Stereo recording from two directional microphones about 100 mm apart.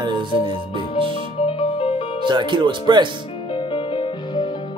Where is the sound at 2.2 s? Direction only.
50° right (ahead or behind).